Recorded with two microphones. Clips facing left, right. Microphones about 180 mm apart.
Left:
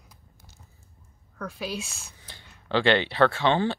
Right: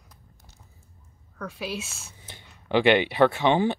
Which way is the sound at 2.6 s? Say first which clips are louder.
Right 3 dB; 15° right (ahead or behind).